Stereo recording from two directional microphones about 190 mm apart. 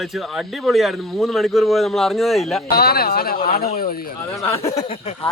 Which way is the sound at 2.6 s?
55° left (ahead or behind).